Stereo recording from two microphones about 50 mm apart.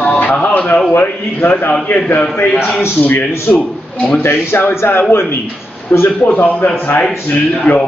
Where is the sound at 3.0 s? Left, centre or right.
Left.